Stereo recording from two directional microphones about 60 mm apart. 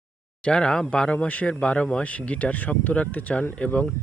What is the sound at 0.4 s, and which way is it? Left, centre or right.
Speech, centre.